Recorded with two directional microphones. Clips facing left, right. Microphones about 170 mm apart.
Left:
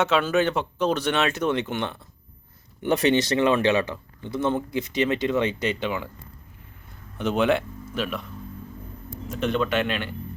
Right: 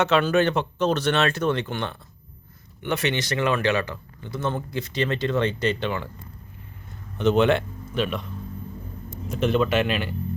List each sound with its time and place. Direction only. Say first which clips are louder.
0.0 s speech: right 1 dB; 5° left (ahead or behind)
2.8 s speech: left 5 dB; 35° left (ahead or behind); by 6.1 s 5° left (ahead or behind)
7.2 s speech: right 3 dB; 5° left (ahead or behind)
9.4 s speech: right 2 dB; 5° right (ahead or behind)